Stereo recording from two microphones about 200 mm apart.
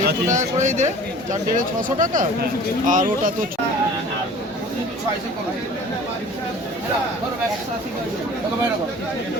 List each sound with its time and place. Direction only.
0.3 s speech: 40° right (ahead or behind)